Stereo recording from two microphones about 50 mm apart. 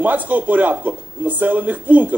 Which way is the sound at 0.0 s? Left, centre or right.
Right.